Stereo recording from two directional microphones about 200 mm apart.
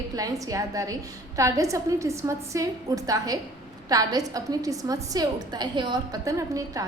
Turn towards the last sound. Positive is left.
turn(degrees=-15)  # may be behind; listen again after turning